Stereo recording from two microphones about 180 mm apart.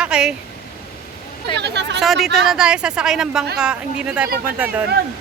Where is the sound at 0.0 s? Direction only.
5° right (ahead or behind).